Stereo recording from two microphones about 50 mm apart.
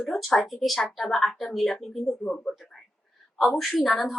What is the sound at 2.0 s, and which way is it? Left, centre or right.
Speech, centre.